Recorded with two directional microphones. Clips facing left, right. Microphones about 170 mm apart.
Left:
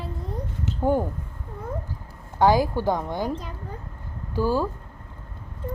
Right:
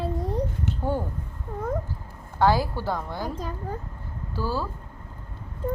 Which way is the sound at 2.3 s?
15° left (ahead or behind).